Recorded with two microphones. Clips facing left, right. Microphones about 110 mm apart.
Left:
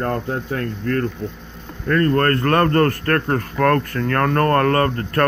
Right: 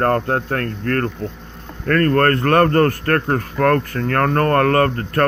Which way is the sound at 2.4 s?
35° right (ahead or behind).